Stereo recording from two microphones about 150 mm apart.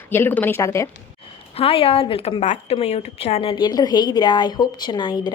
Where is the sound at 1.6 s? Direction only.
40° left (ahead or behind).